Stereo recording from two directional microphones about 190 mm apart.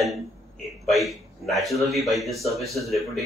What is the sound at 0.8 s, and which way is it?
A man's voice, centre (ahead or behind).